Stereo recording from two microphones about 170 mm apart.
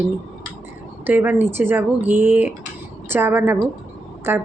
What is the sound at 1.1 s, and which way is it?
Speech, 10° right (ahead or behind).